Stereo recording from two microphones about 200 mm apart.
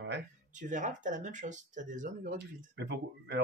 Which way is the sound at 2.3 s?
60° right (ahead or behind).